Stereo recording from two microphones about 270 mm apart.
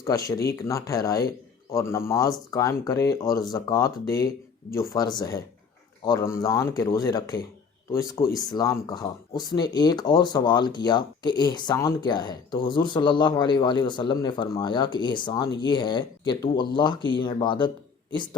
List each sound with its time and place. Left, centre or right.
0.0 s speech: centre